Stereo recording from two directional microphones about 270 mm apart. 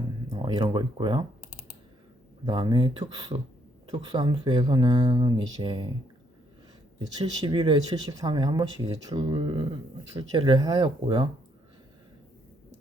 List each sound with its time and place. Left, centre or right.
0.3 s speech: centre
2.5 s speech: centre
7.4 s speech: centre